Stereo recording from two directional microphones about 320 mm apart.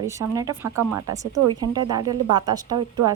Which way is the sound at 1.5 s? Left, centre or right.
Centre.